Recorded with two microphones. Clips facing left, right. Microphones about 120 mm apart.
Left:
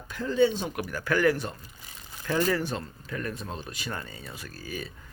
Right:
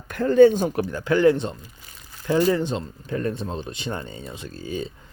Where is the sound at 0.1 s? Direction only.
55° right (ahead or behind).